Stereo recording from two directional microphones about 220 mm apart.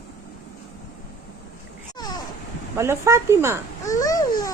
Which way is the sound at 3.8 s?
15° left (ahead or behind).